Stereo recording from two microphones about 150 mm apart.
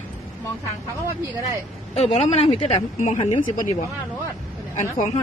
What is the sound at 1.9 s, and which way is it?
A woman's voice, 45° left (ahead or behind).